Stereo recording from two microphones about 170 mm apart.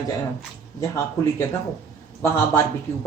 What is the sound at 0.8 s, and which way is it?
Speech, 15° left (ahead or behind).